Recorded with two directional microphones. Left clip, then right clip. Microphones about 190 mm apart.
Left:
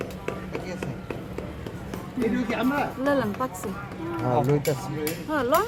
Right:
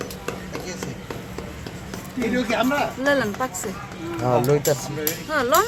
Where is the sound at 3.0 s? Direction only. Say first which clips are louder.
Right 4 dB; 10° right (ahead or behind).